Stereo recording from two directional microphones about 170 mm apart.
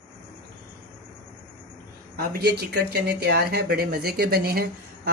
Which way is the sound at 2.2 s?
65° right (ahead or behind).